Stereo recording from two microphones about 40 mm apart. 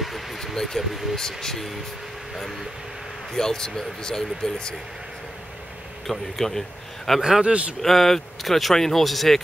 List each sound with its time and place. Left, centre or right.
0.0 s vehicle: centre
1.4 s speech: centre
3.3 s speech: centre
6.0 s speech: centre
7.2 s speech: centre
7.4 s speech: right
7.8 s speech: centre